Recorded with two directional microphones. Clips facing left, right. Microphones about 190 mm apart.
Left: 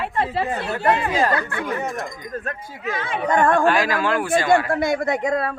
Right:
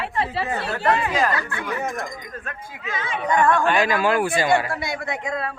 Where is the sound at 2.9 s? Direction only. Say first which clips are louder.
Left 2 dB; 55° left (ahead or behind).